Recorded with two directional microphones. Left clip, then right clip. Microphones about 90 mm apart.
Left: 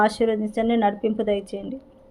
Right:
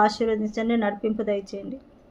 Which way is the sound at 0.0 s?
40° left (ahead or behind).